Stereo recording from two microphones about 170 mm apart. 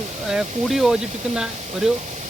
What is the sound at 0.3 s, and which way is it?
Speech, 5° right (ahead or behind).